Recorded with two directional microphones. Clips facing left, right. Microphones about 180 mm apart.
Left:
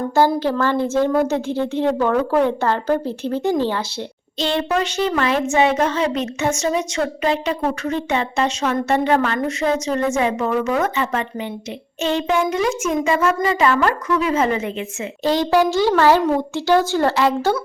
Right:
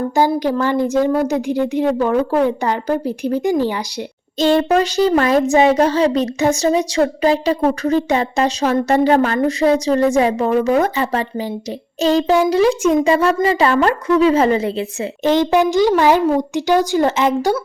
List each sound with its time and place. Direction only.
0.2 s a woman's voice: 15° right (ahead or behind)
4.4 s speech: 45° right (ahead or behind)
15.2 s a woman's voice: 20° right (ahead or behind)